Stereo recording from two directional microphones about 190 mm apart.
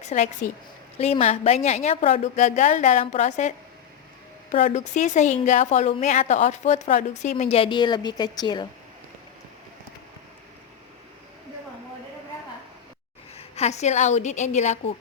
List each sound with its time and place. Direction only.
0.0 s a woman's voice: 35° left (ahead or behind)
4.5 s a woman's voice: 40° left (ahead or behind); by 8.6 s 20° left (ahead or behind)
13.3 s a woman's voice: 35° left (ahead or behind)